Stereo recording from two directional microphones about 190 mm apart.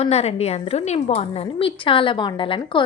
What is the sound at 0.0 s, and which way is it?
A woman's voice, 35° left (ahead or behind).